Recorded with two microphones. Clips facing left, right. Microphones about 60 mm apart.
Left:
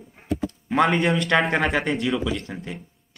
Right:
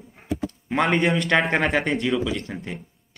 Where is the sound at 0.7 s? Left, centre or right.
Centre.